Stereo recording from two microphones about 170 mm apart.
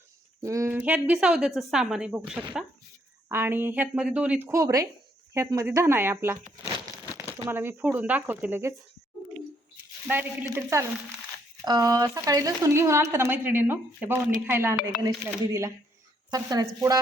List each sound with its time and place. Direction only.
0.4 s speech: 20° right (ahead or behind)
10.1 s a woman's voice: 15° right (ahead or behind)